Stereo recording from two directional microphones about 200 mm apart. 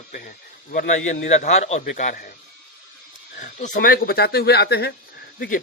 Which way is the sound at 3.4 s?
40° left (ahead or behind).